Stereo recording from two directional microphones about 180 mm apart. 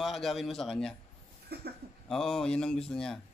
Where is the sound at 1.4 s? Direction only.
60° right (ahead or behind).